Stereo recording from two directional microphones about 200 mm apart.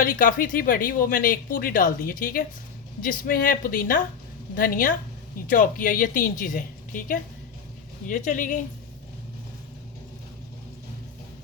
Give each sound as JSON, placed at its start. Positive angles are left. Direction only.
{"t": 0.0, "sound": "a woman's voice", "side_deg": 45}